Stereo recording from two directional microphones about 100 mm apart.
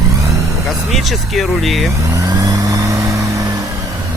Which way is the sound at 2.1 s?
35° right (ahead or behind).